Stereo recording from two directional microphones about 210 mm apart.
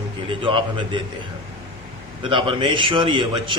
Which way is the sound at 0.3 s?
25° right (ahead or behind).